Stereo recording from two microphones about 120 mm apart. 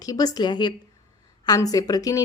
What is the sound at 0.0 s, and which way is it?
A woman's voice, 30° left (ahead or behind).